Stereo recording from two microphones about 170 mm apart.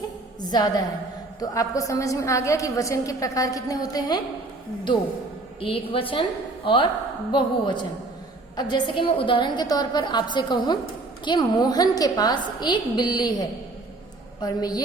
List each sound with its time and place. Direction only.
0.4 s a woman's voice: 25° left (ahead or behind)
5.5 s a woman's voice: 35° left (ahead or behind)
7.3 s a woman's voice: 25° left (ahead or behind)
14.4 s a woman's voice: 20° left (ahead or behind)